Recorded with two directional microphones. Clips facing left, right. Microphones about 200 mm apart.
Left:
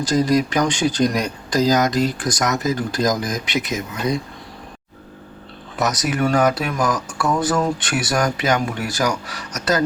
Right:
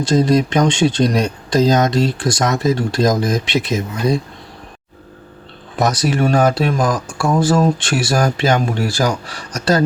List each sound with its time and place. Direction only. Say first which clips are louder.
0.0 s speech: right 3 dB; 25° right (ahead or behind)
5.8 s speech: right 4 dB; 30° right (ahead or behind)